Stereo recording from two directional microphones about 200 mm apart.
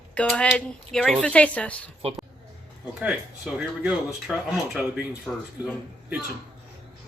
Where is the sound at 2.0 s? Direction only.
30° right (ahead or behind).